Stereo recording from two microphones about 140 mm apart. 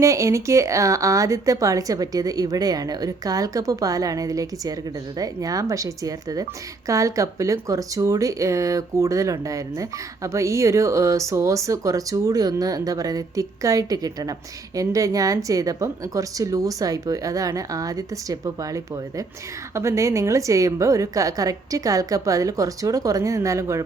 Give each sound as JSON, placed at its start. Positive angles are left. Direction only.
{"t": 0.0, "sound": "speech", "side_deg": -20}